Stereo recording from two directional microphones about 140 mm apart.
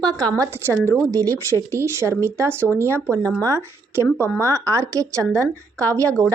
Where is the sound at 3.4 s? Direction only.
20° right (ahead or behind).